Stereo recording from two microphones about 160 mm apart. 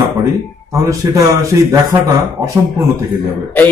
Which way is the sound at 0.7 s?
20° right (ahead or behind).